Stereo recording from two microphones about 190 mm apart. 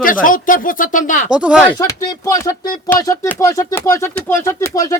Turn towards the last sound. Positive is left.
turn(degrees=15)  # may be behind; listen again after turning